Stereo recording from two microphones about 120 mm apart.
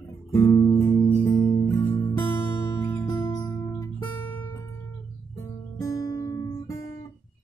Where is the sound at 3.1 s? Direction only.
35° left (ahead or behind).